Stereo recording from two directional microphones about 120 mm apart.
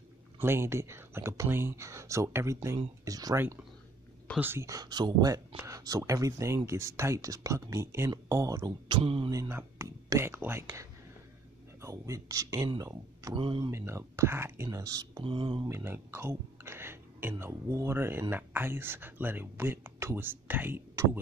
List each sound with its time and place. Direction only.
0.4 s speech: 20° right (ahead or behind)
4.4 s speech: 20° right (ahead or behind); by 9.3 s 50° right (ahead or behind)
9.3 s speech: 25° right (ahead or behind)
13.4 s speech: 45° right (ahead or behind)
13.7 s speech: 25° right (ahead or behind)
15.2 s speech: 45° right (ahead or behind)
15.7 s speech: 20° right (ahead or behind)